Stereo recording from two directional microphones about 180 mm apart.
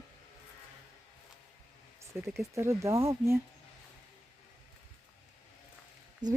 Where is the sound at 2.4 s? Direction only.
15° right (ahead or behind).